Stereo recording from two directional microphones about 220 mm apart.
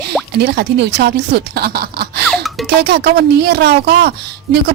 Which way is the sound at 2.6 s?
50° right (ahead or behind).